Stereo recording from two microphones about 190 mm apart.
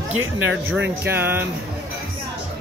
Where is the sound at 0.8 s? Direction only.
10° right (ahead or behind).